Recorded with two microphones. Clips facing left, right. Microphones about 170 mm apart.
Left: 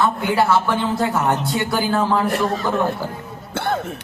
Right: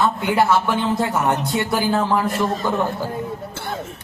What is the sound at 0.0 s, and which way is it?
A man's voice, 20° right (ahead or behind).